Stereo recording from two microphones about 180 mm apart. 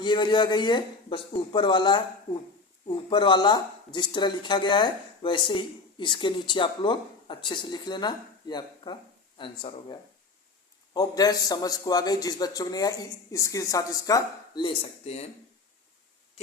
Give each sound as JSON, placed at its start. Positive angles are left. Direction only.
{"t": 0.0, "sound": "speech", "side_deg": 25}
{"t": 3.1, "sound": "speech", "side_deg": 25}